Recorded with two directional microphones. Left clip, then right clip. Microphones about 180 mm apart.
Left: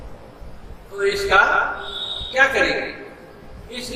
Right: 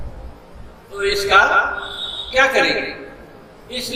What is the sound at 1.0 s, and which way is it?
A man's voice, 40° right (ahead or behind).